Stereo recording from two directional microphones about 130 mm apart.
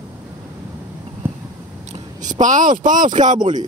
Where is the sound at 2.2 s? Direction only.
75° right (ahead or behind).